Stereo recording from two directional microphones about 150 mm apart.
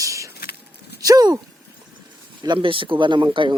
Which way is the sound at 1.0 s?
25° right (ahead or behind).